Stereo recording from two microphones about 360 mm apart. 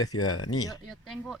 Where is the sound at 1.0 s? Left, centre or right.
Centre.